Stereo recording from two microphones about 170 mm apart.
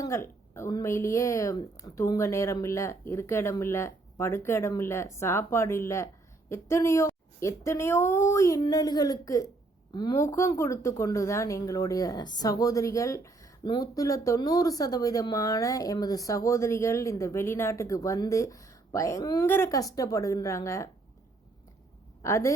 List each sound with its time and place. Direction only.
0.0 s a woman's voice: 15° left (ahead or behind)
22.2 s speech: 15° left (ahead or behind)